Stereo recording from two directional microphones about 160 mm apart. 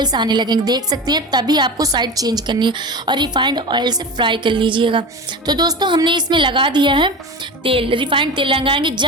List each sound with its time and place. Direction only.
0.0 s a woman's voice: 25° right (ahead or behind)